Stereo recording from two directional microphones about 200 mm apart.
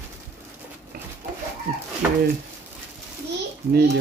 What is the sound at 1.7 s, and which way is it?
Chicken, 45° right (ahead or behind).